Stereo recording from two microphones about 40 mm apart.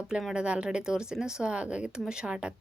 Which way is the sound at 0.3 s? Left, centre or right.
Right.